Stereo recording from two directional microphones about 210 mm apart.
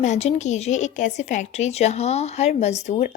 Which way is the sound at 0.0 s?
30° left (ahead or behind).